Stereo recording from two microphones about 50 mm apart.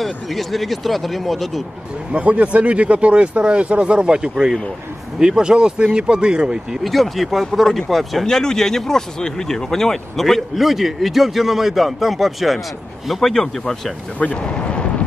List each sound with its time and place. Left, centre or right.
0.0 s speech: centre
2.1 s speech: right
6.8 s speech: centre
14.3 s speech: left